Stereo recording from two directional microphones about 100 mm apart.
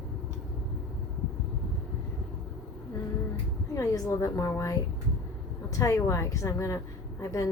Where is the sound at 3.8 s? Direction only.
30° left (ahead or behind).